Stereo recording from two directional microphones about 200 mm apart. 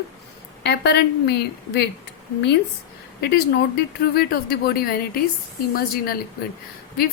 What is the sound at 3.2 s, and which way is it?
Speech, 55° left (ahead or behind).